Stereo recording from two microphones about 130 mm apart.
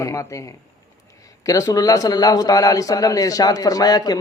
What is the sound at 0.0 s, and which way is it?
A man's voice, 25° left (ahead or behind).